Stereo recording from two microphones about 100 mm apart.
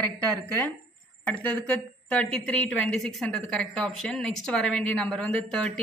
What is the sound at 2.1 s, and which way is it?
A woman's voice, 10° left (ahead or behind).